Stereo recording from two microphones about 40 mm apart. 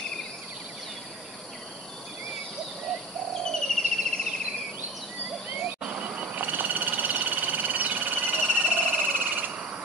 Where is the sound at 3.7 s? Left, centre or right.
Centre.